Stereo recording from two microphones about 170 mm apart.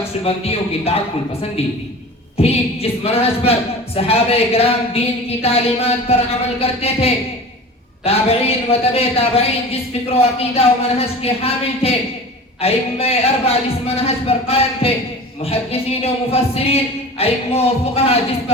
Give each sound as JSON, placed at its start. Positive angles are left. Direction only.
{"t": 0.3, "sound": "a man's voice", "side_deg": 35}
{"t": 2.4, "sound": "a man's voice", "side_deg": 35}